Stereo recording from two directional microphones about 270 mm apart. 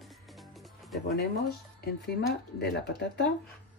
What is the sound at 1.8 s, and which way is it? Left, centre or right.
Speech, left.